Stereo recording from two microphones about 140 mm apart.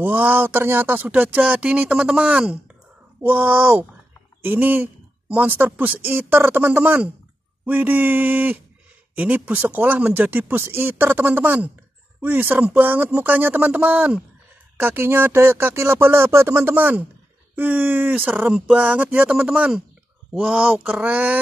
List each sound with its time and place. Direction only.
0.0 s speech: 15° right (ahead or behind)